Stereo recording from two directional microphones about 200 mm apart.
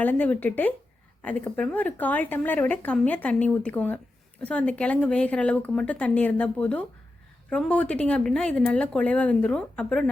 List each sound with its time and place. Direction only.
0.0 s speech: 10° left (ahead or behind)